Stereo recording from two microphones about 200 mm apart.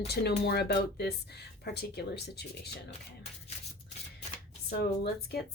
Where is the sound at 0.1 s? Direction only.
55° left (ahead or behind).